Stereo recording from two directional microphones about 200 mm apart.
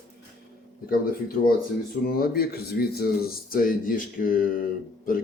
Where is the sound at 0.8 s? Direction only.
45° left (ahead or behind).